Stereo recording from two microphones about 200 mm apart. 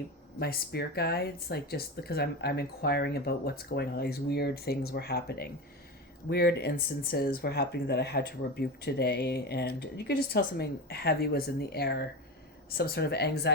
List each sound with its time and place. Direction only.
0.3 s speech: 50° left (ahead or behind)